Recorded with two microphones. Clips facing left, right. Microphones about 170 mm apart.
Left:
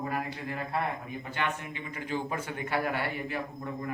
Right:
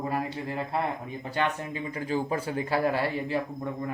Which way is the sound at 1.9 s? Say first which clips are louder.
Right 4 dB; 30° right (ahead or behind).